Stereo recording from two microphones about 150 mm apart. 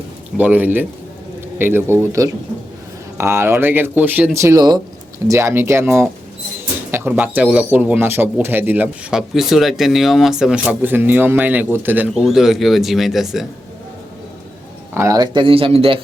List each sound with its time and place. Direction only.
0.3 s speech: 10° right (ahead or behind)
4.4 s speech: 20° right (ahead or behind); by 13.5 s centre (ahead or behind)
14.9 s speech: 20° right (ahead or behind); by 16.0 s 40° right (ahead or behind)